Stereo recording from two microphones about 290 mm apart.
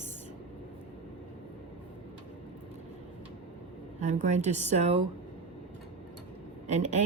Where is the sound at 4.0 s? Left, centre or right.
Right.